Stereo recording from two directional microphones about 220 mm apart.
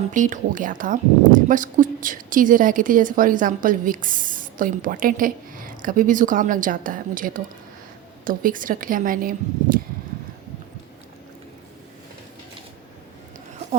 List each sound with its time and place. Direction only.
0.1 s a woman's voice: 35° right (ahead or behind)